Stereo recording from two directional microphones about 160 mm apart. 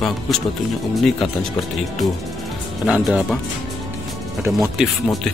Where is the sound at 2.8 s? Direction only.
Centre (ahead or behind).